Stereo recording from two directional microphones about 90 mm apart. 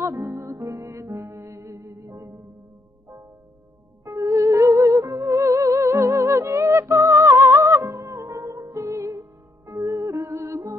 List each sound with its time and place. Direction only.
0.0 s music: 35° right (ahead or behind)
4.0 s music: 35° right (ahead or behind)